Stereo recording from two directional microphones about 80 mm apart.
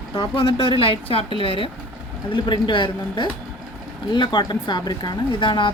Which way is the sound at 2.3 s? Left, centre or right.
Left.